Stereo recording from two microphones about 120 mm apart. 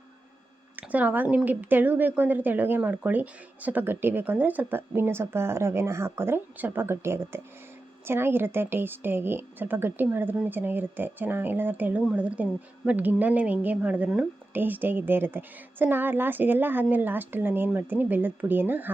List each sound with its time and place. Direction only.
0.8 s a woman's voice: 15° right (ahead or behind)